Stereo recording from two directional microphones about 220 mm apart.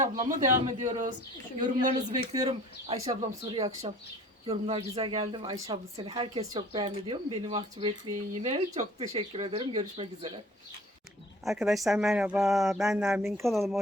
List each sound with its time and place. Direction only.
0.0 s speech: 30° right (ahead or behind)
11.4 s speech: centre (ahead or behind)